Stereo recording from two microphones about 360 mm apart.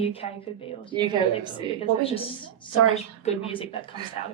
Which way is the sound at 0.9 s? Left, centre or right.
Centre.